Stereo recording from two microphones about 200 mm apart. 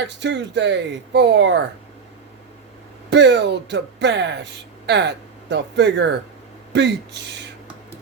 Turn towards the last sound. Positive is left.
turn(degrees=-60)  # may be behind; listen again after turning